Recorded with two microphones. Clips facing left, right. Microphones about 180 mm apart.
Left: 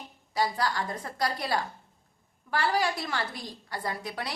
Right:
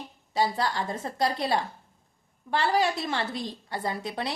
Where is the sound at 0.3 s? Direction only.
25° right (ahead or behind).